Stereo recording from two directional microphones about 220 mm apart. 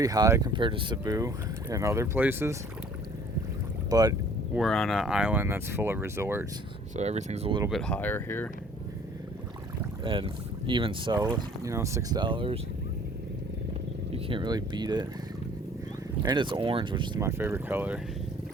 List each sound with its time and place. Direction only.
0.0 s speech: 15° right (ahead or behind)
3.8 s speech: 15° right (ahead or behind)
4.5 s speech: centre (ahead or behind)
6.9 s speech: 30° right (ahead or behind)
7.7 s speech: 5° left (ahead or behind)
10.0 s speech: 25° right (ahead or behind)
14.1 s speech: 25° right (ahead or behind)
16.2 s speech: 20° right (ahead or behind)